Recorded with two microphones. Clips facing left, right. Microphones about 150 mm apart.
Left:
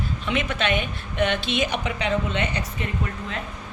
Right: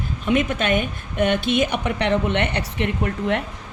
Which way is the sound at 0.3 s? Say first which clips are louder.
Right 5 dB; 50° right (ahead or behind).